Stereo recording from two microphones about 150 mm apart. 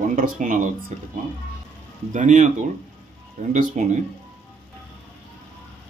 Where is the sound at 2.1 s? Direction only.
55° right (ahead or behind).